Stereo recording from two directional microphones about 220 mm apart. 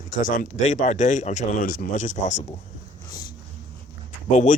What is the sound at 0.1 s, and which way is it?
A man's voice, 35° left (ahead or behind).